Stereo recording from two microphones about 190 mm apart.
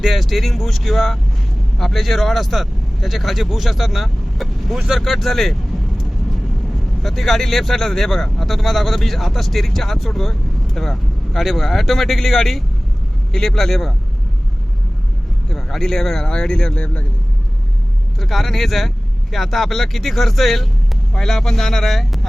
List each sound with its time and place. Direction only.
0.0 s speech: centre (ahead or behind)
7.0 s speech: centre (ahead or behind)
15.4 s speech: centre (ahead or behind)
18.2 s speech: centre (ahead or behind)